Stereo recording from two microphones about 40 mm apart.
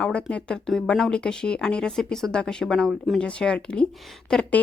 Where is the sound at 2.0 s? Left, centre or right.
Centre.